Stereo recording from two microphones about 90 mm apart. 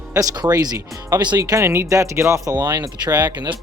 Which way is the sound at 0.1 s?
40° right (ahead or behind).